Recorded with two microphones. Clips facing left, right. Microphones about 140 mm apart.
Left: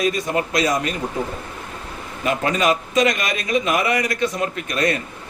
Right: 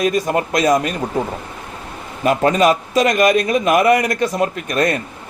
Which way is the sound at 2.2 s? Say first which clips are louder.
Right 6 dB; 45° right (ahead or behind).